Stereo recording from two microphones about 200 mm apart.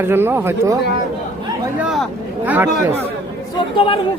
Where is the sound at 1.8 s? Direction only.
Centre (ahead or behind).